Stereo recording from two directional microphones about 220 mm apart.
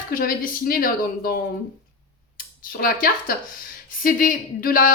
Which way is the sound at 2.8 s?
40° left (ahead or behind).